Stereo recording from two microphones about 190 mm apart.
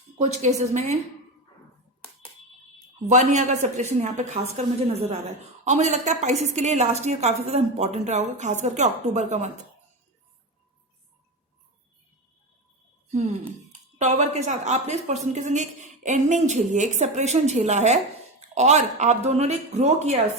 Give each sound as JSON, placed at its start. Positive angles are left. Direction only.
{"t": 0.2, "sound": "speech", "side_deg": -35}
{"t": 3.1, "sound": "speech", "side_deg": -40}
{"t": 14.0, "sound": "speech", "side_deg": -40}